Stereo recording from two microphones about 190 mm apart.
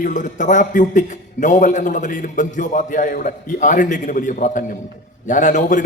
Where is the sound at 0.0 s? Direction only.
40° left (ahead or behind).